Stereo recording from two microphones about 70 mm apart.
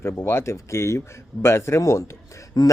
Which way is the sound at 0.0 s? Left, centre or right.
Left.